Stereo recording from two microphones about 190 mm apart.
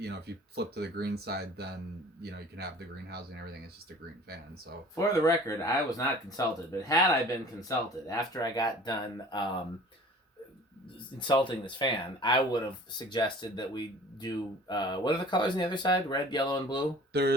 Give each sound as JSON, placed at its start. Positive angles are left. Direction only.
{"t": 0.0, "sound": "speech", "side_deg": -60}
{"t": 4.9, "sound": "speech", "side_deg": 15}
{"t": 11.2, "sound": "speech", "side_deg": 25}
{"t": 17.1, "sound": "speech", "side_deg": -60}